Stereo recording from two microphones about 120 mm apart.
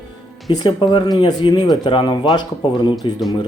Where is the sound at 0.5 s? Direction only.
40° left (ahead or behind).